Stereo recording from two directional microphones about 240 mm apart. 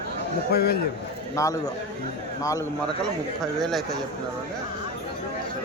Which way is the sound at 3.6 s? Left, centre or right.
Centre.